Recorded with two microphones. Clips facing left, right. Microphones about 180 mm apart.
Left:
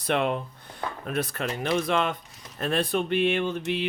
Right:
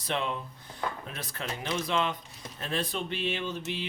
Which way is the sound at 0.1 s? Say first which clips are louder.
Left 7 dB; 60° left (ahead or behind).